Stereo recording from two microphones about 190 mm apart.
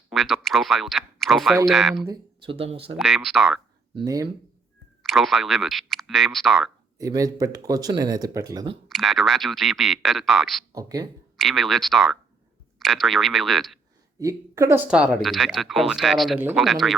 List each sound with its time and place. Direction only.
0.1 s speech: centre (ahead or behind)
2.0 s speech: 25° right (ahead or behind)
3.0 s speech: centre (ahead or behind)
3.9 s speech: 20° right (ahead or behind)
5.0 s speech: centre (ahead or behind)
7.0 s speech: 20° right (ahead or behind)
8.9 s speech: centre (ahead or behind)
10.7 s speech: 20° right (ahead or behind)
11.3 s speech: centre (ahead or behind)
14.2 s a woman's voice: 15° right (ahead or behind); by 17.0 s centre (ahead or behind)